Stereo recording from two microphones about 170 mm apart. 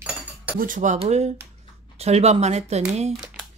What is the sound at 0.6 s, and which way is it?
Speech, 50° right (ahead or behind).